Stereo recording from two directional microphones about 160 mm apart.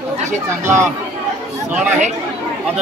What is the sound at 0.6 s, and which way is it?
Speech, 15° right (ahead or behind).